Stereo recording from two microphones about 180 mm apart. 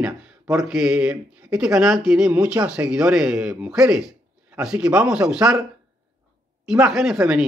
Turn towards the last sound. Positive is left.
turn(degrees=-5)  # may be behind; listen again after turning